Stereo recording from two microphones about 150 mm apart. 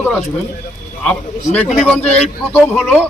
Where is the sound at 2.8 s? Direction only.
5° right (ahead or behind).